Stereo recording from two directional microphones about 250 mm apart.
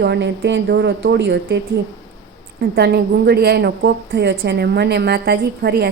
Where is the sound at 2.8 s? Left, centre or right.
Right.